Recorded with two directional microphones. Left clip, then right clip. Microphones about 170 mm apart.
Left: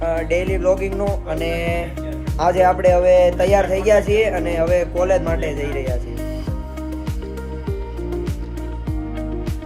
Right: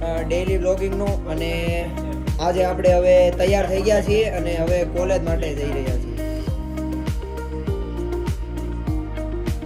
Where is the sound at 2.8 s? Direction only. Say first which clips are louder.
Right 1 dB; 25° left (ahead or behind).